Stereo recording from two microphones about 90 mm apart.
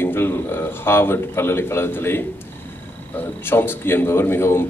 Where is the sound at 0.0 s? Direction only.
25° left (ahead or behind).